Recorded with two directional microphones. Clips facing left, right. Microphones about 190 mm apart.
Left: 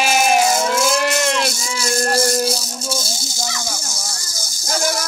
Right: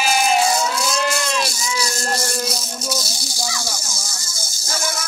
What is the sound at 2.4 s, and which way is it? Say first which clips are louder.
Music: left 4 dB; 30° left (ahead or behind).